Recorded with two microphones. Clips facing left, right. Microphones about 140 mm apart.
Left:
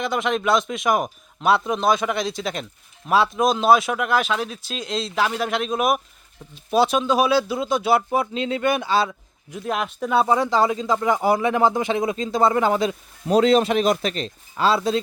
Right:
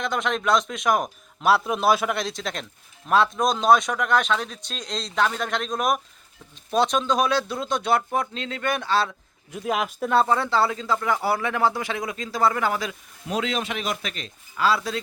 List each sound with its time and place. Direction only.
0.0 s speech: 5° left (ahead or behind)
10.2 s speech: 15° left (ahead or behind)